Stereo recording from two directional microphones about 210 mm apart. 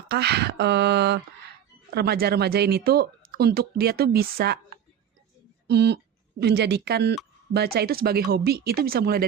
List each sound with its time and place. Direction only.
0.1 s speech: 50° right (ahead or behind)
5.6 s speech: 55° right (ahead or behind)